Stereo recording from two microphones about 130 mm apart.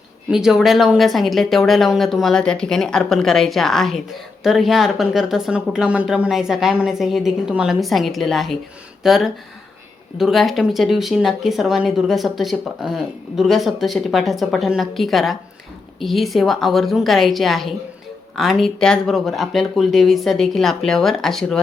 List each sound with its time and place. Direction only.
0.3 s speech: 5° right (ahead or behind)